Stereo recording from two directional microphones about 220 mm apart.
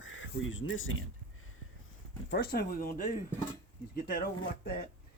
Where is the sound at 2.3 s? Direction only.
50° left (ahead or behind).